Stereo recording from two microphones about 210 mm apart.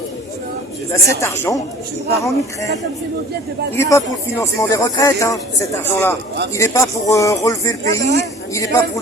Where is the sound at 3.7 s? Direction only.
15° left (ahead or behind).